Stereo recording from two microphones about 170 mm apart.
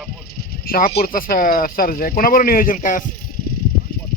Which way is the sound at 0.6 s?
60° left (ahead or behind).